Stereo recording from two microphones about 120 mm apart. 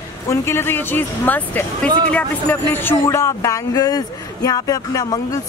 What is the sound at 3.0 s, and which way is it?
Speech, 25° left (ahead or behind).